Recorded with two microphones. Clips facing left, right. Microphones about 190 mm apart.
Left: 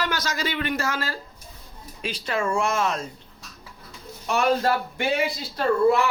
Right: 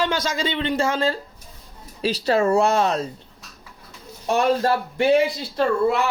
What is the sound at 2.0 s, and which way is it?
Speech, 35° right (ahead or behind).